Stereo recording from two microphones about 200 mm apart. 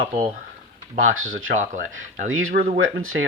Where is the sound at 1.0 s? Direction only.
85° right.